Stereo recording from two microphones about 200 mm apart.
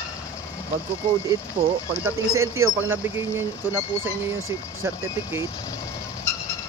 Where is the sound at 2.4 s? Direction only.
15° right (ahead or behind).